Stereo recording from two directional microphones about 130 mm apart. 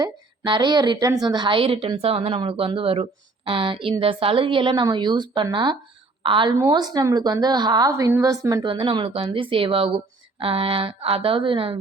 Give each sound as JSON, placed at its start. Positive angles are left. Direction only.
{"t": 0.0, "sound": "a woman's voice", "side_deg": -35}
{"t": 6.6, "sound": "a woman's voice", "side_deg": -30}
{"t": 8.6, "sound": "a woman's voice", "side_deg": -40}